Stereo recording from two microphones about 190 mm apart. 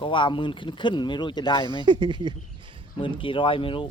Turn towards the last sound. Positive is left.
turn(degrees=30)  # may be behind; listen again after turning